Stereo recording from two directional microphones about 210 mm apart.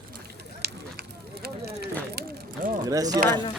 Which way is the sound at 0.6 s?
50° right (ahead or behind).